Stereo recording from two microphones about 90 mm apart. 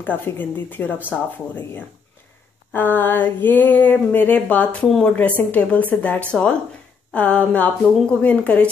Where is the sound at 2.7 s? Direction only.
20° left (ahead or behind).